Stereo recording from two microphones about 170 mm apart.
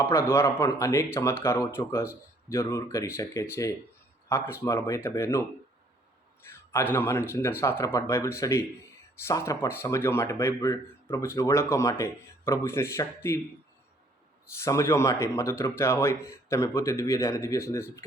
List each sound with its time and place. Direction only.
0.0 s speech: 15° left (ahead or behind)
6.7 s speech: 15° left (ahead or behind)
14.6 s speech: 20° left (ahead or behind)